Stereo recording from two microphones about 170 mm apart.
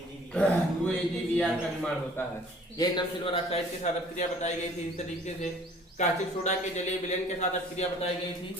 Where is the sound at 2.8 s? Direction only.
30° left (ahead or behind).